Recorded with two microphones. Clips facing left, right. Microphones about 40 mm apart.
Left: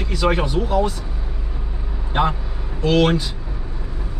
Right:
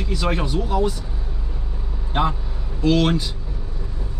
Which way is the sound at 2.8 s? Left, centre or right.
Centre.